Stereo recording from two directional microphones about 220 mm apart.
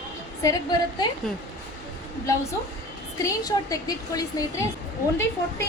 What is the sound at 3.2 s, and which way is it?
Speech, 15° left (ahead or behind).